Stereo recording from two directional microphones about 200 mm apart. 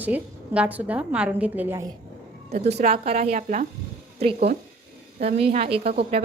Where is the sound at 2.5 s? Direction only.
30° right (ahead or behind).